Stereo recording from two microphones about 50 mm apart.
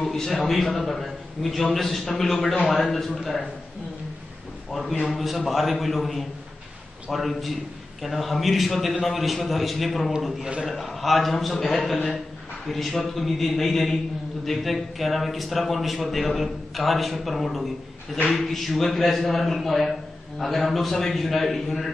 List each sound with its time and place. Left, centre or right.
0.0 s a man's voice: centre
5.0 s a man's voice: centre
18.1 s a man's voice: centre
18.4 s a man's voice: centre